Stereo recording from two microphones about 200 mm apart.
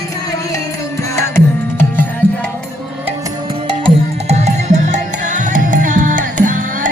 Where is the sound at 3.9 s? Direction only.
35° right (ahead or behind).